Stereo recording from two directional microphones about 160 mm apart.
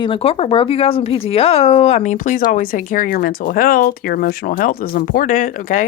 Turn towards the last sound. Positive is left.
turn(degrees=55)  # may be behind; listen again after turning